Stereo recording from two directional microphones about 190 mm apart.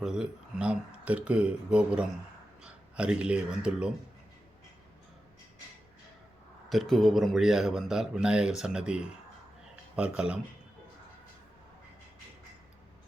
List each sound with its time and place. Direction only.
0.0 s a man's voice: 5° right (ahead or behind)
6.7 s a man's voice: centre (ahead or behind)